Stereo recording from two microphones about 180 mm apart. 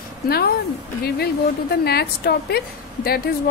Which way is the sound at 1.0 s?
60° left (ahead or behind).